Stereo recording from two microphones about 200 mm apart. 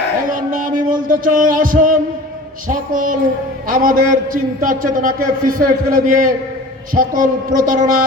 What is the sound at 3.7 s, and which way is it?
A man's voice, 45° right (ahead or behind).